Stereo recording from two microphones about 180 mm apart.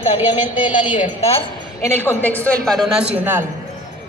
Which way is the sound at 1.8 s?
15° left (ahead or behind).